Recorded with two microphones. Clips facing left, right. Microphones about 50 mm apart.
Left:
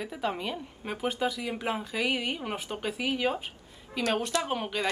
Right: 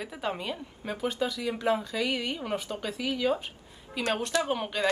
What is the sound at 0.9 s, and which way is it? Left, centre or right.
Speech, left.